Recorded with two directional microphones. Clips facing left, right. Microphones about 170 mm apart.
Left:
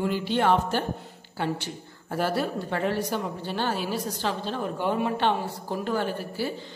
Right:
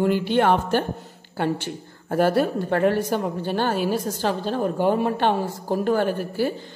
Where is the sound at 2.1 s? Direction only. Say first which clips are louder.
Right 7 dB; 50° right (ahead or behind).